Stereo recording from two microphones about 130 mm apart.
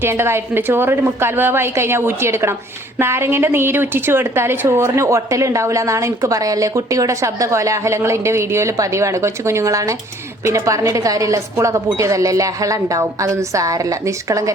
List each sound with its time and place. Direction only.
0.0 s a woman's voice: 20° right (ahead or behind)